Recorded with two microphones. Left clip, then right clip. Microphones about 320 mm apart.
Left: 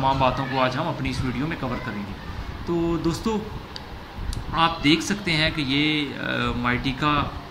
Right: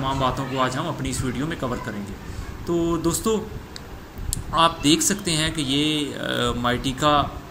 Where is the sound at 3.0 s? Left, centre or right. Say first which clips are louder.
Right 3 dB; centre.